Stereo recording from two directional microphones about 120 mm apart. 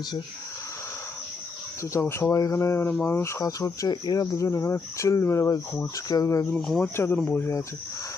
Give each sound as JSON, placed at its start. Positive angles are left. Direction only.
{"t": 1.8, "sound": "speech", "side_deg": 20}
{"t": 6.6, "sound": "speech", "side_deg": 5}
{"t": 6.8, "sound": "speech", "side_deg": 20}